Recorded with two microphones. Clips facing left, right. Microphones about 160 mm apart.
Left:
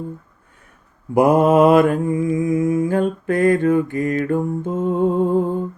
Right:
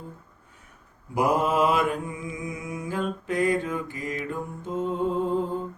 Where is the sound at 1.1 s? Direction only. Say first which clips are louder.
Left 10 dB; 50° left (ahead or behind).